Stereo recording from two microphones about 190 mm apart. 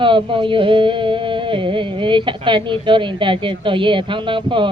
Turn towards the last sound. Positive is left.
turn(degrees=-25)  # may be behind; listen again after turning